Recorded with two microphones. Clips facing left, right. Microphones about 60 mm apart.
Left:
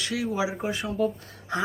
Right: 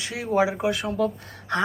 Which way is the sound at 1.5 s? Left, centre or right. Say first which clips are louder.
Right 4 dB; right.